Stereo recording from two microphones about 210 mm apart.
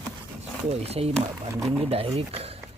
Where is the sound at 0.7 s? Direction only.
30° right (ahead or behind).